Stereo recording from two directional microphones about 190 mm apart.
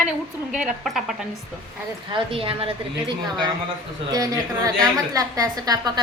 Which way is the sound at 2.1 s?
30° right (ahead or behind).